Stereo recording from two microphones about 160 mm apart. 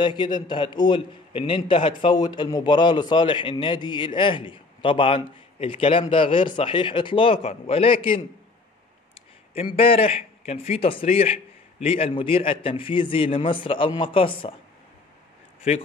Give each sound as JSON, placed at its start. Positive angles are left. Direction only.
{"t": 0.0, "sound": "a man's voice", "side_deg": 30}
{"t": 15.7, "sound": "a man's voice", "side_deg": 45}